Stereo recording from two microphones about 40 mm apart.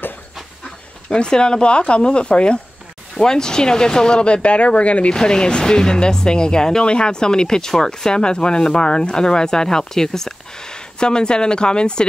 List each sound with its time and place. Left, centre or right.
1.1 s speech: left
5.1 s speech: centre